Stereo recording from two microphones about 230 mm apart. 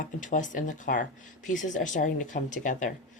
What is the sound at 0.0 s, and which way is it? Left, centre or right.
A woman's voice, left.